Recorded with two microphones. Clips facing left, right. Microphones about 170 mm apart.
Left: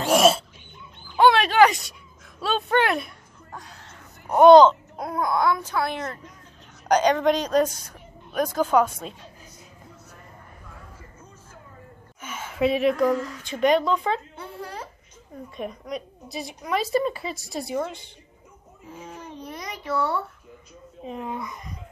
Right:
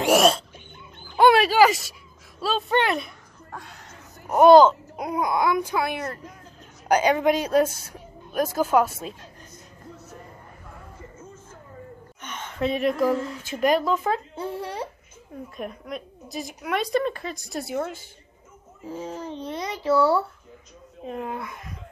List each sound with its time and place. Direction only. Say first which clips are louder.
1.1 s dog: right 1 dB; 10° right (ahead or behind)
2.4 s a woman's voice: left 1 dB; centre (ahead or behind)
4.3 s a woman's voice: left 1 dB; 5° right (ahead or behind)
4.9 s a woman's voice: even; 15° right (ahead or behind)
12.2 s speech: left 3 dB; 5° left (ahead or behind)
14.6 s babbling: right 4 dB; 25° right (ahead or behind)
15.5 s a woman's voice: left 2 dB; centre (ahead or behind)
18.9 s speech: right 7 dB; 30° right (ahead or behind)
21.0 s a woman's voice: right 1 dB; centre (ahead or behind)